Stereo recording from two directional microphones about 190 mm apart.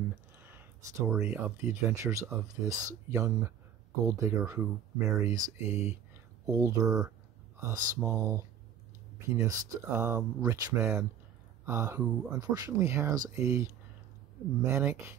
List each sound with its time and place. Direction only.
0.4 s speech: 10° right (ahead or behind)
12.3 s speech: 20° right (ahead or behind)